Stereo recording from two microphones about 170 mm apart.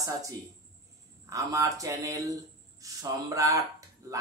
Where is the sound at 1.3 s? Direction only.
20° right (ahead or behind).